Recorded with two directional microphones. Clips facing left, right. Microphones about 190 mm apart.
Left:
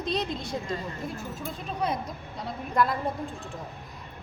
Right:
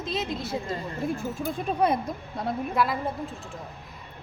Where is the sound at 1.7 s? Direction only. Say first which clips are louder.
Right 5 dB; 55° right (ahead or behind).